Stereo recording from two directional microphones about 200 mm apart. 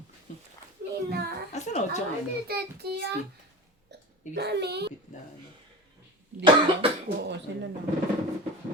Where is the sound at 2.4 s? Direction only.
55° right (ahead or behind).